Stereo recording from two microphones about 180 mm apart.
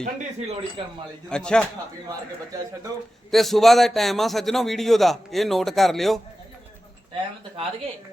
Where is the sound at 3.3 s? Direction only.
Centre (ahead or behind).